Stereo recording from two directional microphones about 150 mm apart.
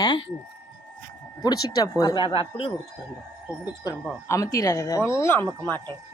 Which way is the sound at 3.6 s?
25° left (ahead or behind).